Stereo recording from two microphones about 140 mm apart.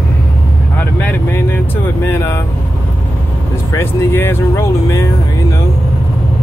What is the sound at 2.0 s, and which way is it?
Speech, 15° left (ahead or behind).